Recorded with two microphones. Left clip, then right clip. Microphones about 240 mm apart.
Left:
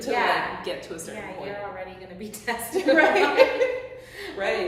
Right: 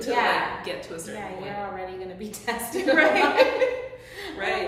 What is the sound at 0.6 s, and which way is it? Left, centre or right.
Speech, centre.